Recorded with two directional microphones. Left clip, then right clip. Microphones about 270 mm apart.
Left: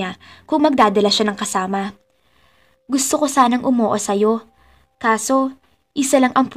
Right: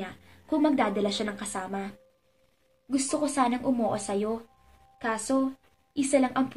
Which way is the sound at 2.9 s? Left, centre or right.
Left.